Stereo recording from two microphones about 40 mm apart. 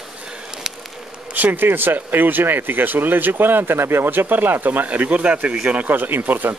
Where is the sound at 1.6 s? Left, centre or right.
Right.